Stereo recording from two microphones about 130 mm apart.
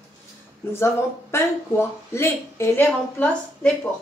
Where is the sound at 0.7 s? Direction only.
20° left (ahead or behind).